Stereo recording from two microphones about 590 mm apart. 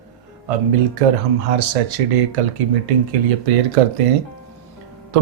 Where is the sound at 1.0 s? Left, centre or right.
Right.